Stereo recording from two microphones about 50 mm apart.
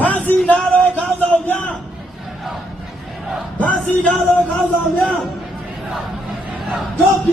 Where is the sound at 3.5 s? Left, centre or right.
Left.